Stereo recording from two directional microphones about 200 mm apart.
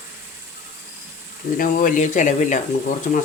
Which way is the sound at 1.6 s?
40° left (ahead or behind).